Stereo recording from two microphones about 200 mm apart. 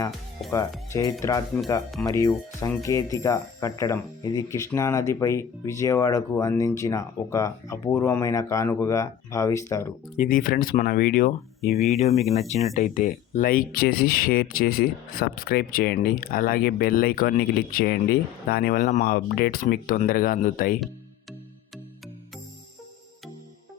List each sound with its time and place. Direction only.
1.2 s speech: 15° left (ahead or behind)
10.2 s speech: 45° left (ahead or behind)
11.8 s speech: 35° left (ahead or behind)